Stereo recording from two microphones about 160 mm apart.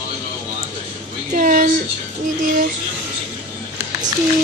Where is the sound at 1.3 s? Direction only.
55° right (ahead or behind).